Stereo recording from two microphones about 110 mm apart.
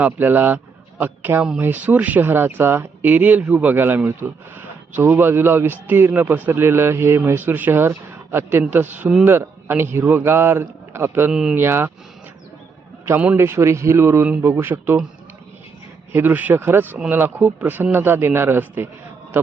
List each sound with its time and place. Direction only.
0.0 s a man's voice: 15° right (ahead or behind)
11.3 s speech: 10° right (ahead or behind)
11.5 s a man's voice: 20° right (ahead or behind)
13.1 s a man's voice: 20° right (ahead or behind)
16.1 s a man's voice: 15° right (ahead or behind)